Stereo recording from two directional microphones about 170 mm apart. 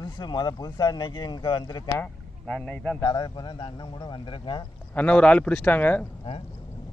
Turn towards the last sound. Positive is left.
turn(degrees=10)  # may be behind; listen again after turning